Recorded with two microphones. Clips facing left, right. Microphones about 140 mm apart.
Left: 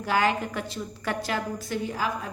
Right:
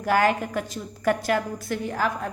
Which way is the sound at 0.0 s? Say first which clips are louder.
Right 3 dB; 50° right (ahead or behind).